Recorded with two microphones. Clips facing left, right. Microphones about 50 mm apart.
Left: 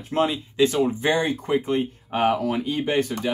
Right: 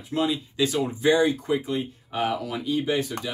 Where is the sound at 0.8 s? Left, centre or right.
Left.